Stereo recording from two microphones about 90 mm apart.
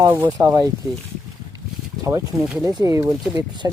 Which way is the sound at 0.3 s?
40° right (ahead or behind).